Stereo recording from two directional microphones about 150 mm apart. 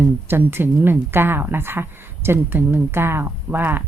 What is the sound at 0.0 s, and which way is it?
Speech, 15° right (ahead or behind).